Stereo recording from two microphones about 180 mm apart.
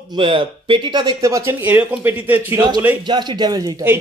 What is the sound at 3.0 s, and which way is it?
Speech, 25° right (ahead or behind).